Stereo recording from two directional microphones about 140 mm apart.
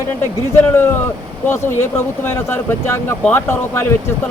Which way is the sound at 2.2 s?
15° left (ahead or behind).